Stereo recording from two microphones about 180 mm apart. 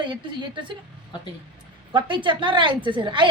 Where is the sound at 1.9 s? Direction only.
25° right (ahead or behind).